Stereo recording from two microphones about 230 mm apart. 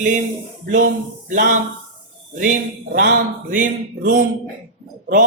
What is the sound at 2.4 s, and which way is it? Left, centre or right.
A woman's voice, right.